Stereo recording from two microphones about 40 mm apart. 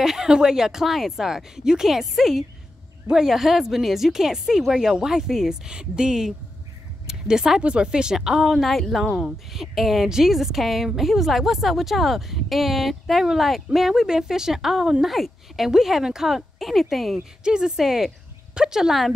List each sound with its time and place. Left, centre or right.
0.0 s speech: centre
0.8 s speech: centre
5.7 s speech: right; by 17.2 s centre
17.5 s speech: right
17.7 s speech: centre